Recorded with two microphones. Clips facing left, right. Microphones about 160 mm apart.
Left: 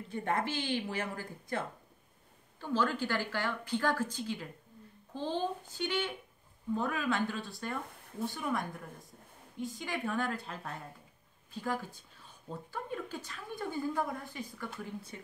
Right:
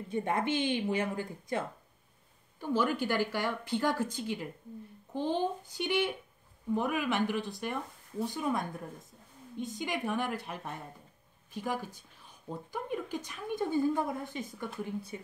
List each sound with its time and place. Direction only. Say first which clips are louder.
0.1 s a woman's voice: right 3 dB; 15° right (ahead or behind)
2.6 s a woman's voice: right 2 dB; 15° right (ahead or behind)